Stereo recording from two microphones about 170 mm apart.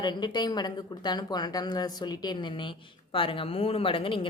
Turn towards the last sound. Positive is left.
turn(degrees=30)  # may be behind; listen again after turning